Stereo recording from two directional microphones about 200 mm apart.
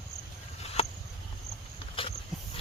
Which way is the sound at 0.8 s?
30° left (ahead or behind).